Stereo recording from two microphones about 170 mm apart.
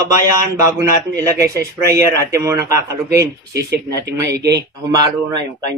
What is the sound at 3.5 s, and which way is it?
Speech, 70° right (ahead or behind).